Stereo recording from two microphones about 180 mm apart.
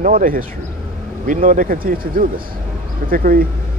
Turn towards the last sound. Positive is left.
turn(degrees=-55)  # may be behind; listen again after turning